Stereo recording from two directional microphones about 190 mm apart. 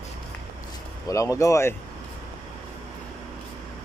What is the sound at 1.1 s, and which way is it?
Speech, 15° left (ahead or behind).